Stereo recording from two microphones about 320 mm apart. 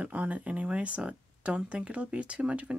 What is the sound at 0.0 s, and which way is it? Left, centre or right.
Speech, centre.